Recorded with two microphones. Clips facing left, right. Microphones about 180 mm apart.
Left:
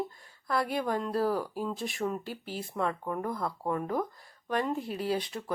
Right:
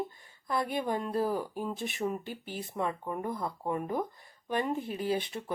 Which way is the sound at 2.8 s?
10° right (ahead or behind).